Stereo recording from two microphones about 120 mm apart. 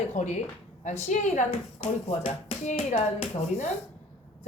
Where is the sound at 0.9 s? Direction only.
75° left (ahead or behind).